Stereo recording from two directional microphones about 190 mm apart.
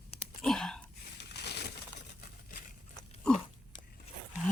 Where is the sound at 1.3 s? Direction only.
60° left (ahead or behind).